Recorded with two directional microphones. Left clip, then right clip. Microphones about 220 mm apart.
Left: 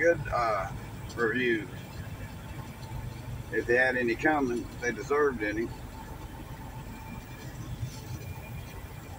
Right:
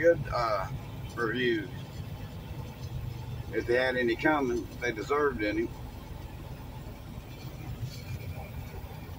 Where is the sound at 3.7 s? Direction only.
10° right (ahead or behind).